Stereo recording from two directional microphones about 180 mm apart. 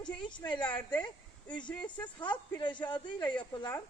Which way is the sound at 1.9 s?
25° left (ahead or behind).